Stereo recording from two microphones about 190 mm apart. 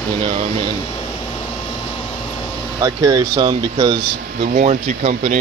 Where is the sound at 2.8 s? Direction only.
20° right (ahead or behind).